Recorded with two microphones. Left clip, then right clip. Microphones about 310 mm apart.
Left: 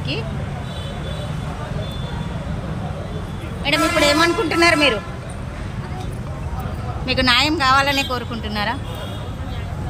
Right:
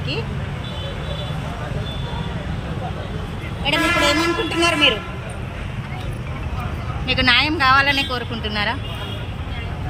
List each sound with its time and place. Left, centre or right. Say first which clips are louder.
3.6 s a man's voice: left 1 dB; centre
7.1 s a woman's voice: even; centre